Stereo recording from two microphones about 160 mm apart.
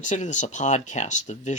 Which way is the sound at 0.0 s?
50° left (ahead or behind).